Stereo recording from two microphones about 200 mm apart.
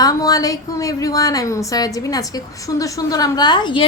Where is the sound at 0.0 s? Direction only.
20° left (ahead or behind).